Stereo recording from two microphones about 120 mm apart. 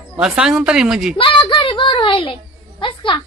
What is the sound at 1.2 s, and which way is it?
Speech, 45° left (ahead or behind).